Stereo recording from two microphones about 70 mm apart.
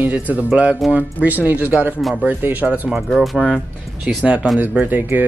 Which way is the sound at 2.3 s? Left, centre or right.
Right.